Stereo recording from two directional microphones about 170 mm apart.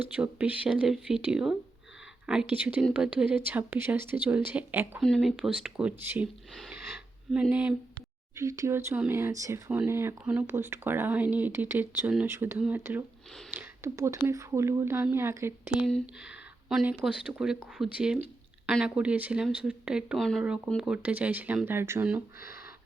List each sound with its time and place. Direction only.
0.0 s speech: 10° right (ahead or behind)
4.9 s speech: centre (ahead or behind)
6.5 s a sound: centre (ahead or behind)
8.4 s speech: 20° right (ahead or behind)